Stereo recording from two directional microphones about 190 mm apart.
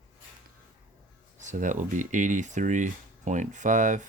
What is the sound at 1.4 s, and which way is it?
Speech, 40° right (ahead or behind).